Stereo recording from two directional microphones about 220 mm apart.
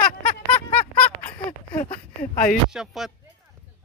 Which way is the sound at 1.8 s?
35° left (ahead or behind).